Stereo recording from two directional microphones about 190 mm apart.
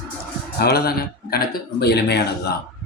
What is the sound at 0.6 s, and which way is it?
Speech, 55° left (ahead or behind).